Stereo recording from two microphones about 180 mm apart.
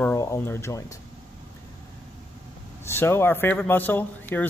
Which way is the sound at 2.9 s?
15° left (ahead or behind).